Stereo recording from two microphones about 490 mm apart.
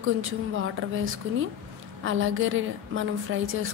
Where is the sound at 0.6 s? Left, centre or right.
Right.